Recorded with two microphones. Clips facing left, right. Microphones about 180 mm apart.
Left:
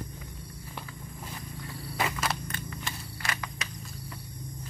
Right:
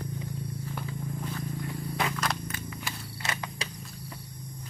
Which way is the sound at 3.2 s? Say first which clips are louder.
Right 2 dB; 25° right (ahead or behind).